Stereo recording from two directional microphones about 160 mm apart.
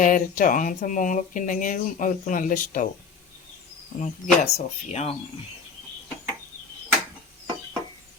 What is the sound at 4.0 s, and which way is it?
Speech, 45° left (ahead or behind).